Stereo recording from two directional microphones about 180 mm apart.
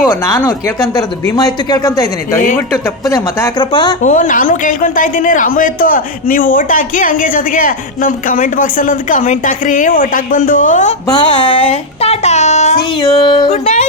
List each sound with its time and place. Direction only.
0.1 s a man's voice: 15° left (ahead or behind)
3.7 s a man's voice: 30° left (ahead or behind)
4.0 s a man's voice: 45° left (ahead or behind)
11.1 s speech: 25° left (ahead or behind)
13.0 s a man's voice: 25° left (ahead or behind)
13.5 s speech: 40° left (ahead or behind)